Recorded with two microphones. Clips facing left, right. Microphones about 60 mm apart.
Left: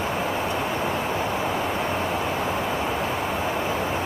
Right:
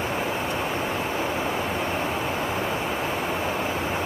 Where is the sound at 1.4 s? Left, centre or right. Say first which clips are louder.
Left 1 dB; centre.